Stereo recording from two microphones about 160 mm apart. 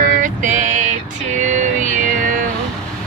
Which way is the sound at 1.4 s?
50° right (ahead or behind).